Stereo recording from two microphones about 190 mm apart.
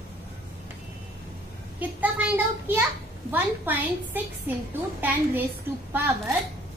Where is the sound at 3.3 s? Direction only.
10° right (ahead or behind).